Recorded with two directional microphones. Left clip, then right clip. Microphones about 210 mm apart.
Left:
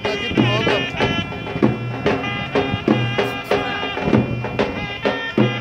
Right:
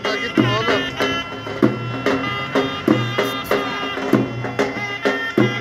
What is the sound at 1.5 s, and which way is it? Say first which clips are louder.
Music: right 1 dB; 35° right (ahead or behind).